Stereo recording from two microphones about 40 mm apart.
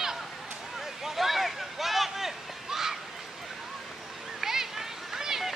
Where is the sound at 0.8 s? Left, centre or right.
Centre.